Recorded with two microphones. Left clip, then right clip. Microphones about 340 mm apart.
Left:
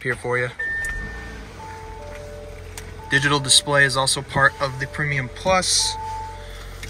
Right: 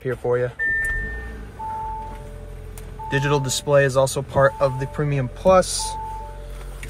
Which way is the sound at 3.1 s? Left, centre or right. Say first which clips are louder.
Left 5 dB; centre.